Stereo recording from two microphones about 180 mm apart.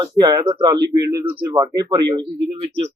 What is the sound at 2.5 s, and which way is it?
Speech, 35° right (ahead or behind).